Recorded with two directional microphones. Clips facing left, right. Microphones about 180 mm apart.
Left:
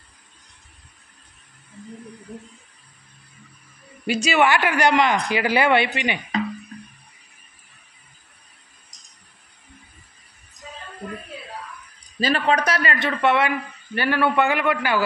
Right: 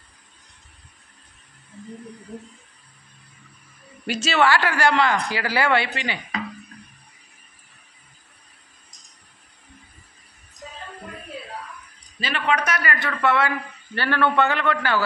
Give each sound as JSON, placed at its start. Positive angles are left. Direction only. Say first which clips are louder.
{"t": 4.0, "sound": "a man's voice", "louder": "left 2 dB", "side_deg": 10}
{"t": 12.2, "sound": "a man's voice", "louder": "left 4 dB", "side_deg": 40}